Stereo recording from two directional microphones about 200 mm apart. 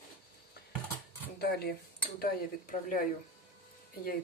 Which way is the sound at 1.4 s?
50° left (ahead or behind).